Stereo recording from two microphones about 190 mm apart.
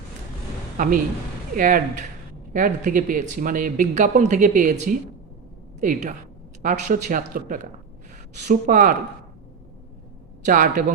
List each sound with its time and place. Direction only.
0.8 s speech: 45° right (ahead or behind)
10.4 s speech: 45° right (ahead or behind)